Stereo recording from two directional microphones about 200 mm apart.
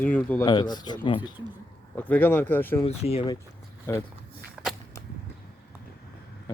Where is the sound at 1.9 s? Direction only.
5° left (ahead or behind).